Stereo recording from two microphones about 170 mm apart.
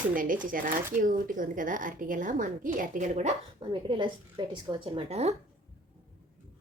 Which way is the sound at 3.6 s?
30° right (ahead or behind).